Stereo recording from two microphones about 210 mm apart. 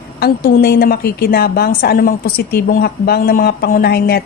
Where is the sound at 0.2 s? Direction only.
50° left (ahead or behind).